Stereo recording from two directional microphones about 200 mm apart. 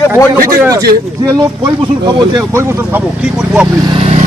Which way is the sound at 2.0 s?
15° right (ahead or behind).